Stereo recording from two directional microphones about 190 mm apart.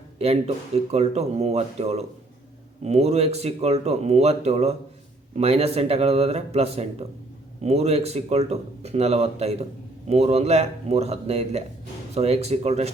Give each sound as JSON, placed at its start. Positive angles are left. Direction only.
{"t": 0.2, "sound": "speech", "side_deg": -35}